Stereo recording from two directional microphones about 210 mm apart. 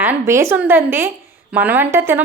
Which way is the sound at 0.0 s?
10° right (ahead or behind).